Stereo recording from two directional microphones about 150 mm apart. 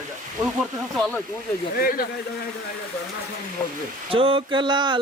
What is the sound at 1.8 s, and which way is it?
Speech, 85° left.